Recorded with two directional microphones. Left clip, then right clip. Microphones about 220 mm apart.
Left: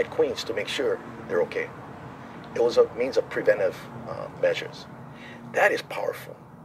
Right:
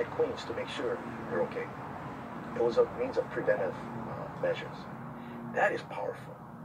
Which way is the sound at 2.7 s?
45° left (ahead or behind).